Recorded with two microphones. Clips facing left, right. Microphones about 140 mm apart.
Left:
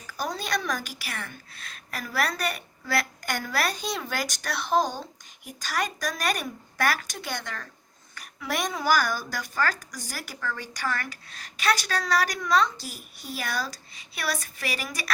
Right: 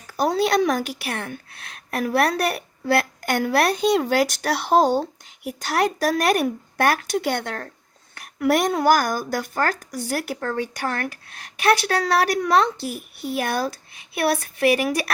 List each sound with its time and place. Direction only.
0.1 s a woman's voice: 60° right (ahead or behind)